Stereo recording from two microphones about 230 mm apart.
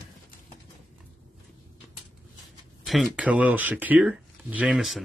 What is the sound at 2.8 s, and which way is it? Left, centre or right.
Speech, centre.